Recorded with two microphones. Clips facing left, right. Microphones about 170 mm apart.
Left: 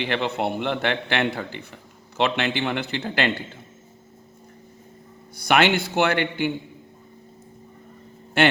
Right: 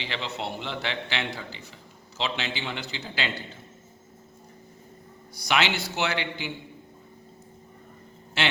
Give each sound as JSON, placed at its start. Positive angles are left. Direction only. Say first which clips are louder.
{"t": 0.0, "sound": "a man's voice", "louder": "left 9 dB", "side_deg": 55}
{"t": 5.4, "sound": "a man's voice", "louder": "left 7 dB", "side_deg": 55}
{"t": 8.4, "sound": "speech", "louder": "left 9 dB", "side_deg": 55}